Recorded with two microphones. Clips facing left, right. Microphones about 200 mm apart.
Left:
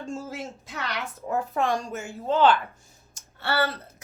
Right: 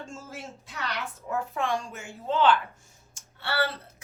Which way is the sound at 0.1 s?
35° left (ahead or behind).